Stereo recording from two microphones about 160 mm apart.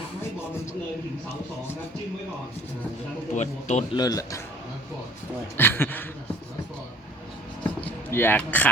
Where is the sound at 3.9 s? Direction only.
25° left (ahead or behind).